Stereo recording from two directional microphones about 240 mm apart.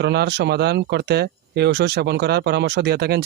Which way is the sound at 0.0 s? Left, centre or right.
Right.